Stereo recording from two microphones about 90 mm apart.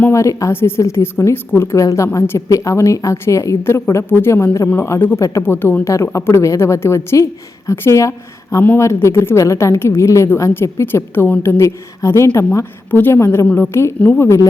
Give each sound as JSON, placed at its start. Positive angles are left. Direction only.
{"t": 0.1, "sound": "a woman's voice", "side_deg": 35}